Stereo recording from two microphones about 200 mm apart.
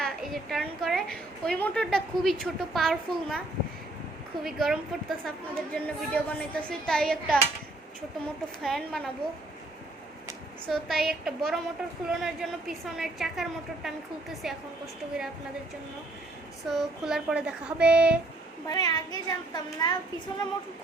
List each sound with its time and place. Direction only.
0.0 s a woman's voice: centre (ahead or behind)
4.4 s a woman's voice: centre (ahead or behind)
8.6 s a woman's voice: centre (ahead or behind)
10.7 s a woman's voice: centre (ahead or behind)
16.6 s a woman's voice: centre (ahead or behind)
18.7 s speech: 20° left (ahead or behind)